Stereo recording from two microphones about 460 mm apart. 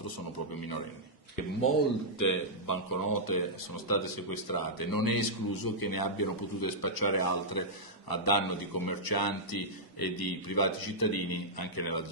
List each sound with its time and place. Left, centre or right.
2.1 s a man's voice: left